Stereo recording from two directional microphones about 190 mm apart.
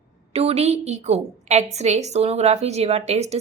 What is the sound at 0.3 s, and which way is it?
A woman's voice, 30° right (ahead or behind).